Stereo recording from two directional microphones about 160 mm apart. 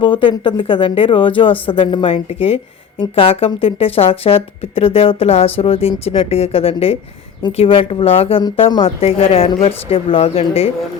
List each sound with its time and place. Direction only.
0.0 s speech: 30° left (ahead or behind)